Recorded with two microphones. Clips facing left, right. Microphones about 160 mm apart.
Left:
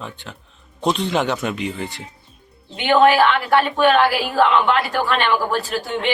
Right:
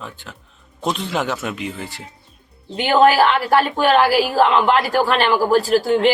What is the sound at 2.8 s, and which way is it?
A woman's voice, 40° right (ahead or behind).